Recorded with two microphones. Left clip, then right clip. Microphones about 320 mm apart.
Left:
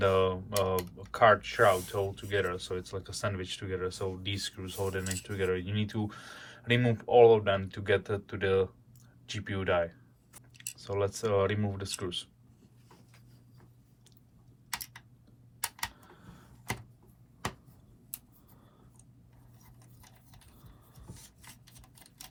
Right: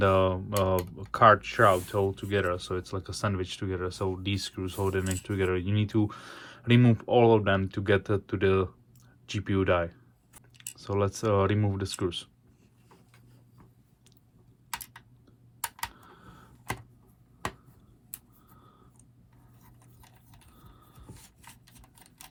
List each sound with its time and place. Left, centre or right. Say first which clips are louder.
0.0 s speech: right 3 dB; centre